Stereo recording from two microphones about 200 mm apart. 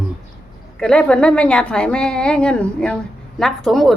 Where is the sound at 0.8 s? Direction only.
5° left (ahead or behind).